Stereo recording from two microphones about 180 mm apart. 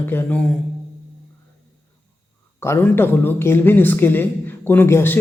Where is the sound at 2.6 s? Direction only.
15° left (ahead or behind).